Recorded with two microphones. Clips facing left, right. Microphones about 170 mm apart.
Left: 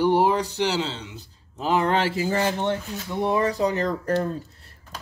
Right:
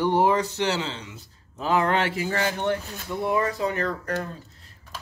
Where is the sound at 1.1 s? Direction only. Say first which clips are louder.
Left 2 dB; 30° left (ahead or behind).